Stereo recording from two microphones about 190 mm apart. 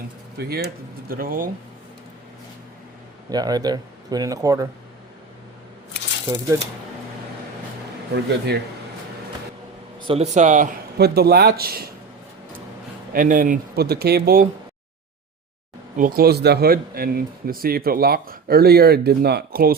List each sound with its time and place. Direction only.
0.3 s speech: 55° right (ahead or behind)
3.3 s speech: 20° right (ahead or behind)
8.1 s speech: 60° right (ahead or behind)
10.1 s speech: 35° right (ahead or behind); by 11.9 s 55° right (ahead or behind)
13.1 s speech: 45° right (ahead or behind)
16.0 s speech: 50° right (ahead or behind)